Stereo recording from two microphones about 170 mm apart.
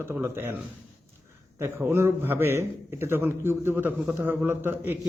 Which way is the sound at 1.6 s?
15° right (ahead or behind).